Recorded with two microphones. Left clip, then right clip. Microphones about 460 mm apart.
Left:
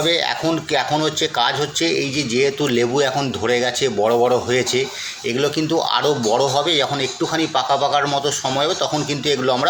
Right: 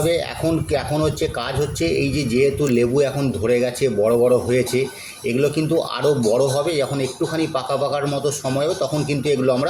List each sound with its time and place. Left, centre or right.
1.9 s speech: right
9.2 s speech: right